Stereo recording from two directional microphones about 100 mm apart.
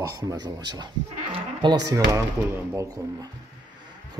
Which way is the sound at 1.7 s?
35° right (ahead or behind).